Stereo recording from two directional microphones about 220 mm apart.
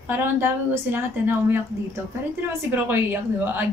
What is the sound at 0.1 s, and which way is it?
A woman's voice, 10° right (ahead or behind).